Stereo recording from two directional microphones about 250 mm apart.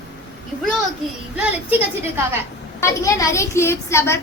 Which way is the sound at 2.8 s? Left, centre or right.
Centre.